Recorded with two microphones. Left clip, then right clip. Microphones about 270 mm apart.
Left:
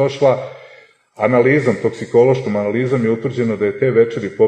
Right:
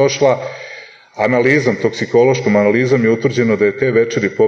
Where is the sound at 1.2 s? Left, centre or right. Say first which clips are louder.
Even; right.